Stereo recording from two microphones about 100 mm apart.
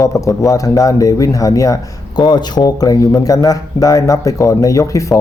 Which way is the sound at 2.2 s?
45° left (ahead or behind).